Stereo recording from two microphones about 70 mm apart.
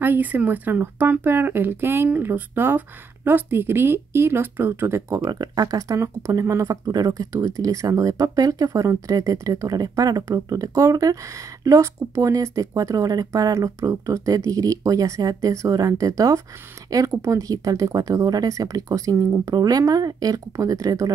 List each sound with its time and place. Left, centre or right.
0.0 s speech: right
5.3 s speech: right
19.5 s speech: right